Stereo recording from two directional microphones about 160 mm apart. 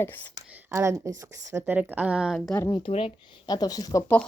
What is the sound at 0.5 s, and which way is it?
A woman's voice, 15° right (ahead or behind).